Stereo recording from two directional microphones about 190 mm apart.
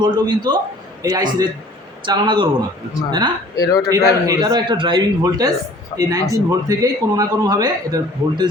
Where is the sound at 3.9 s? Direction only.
20° right (ahead or behind).